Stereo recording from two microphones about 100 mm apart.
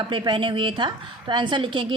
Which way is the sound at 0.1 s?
55° right (ahead or behind).